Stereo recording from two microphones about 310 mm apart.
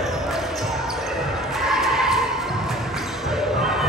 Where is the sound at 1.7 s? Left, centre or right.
Centre.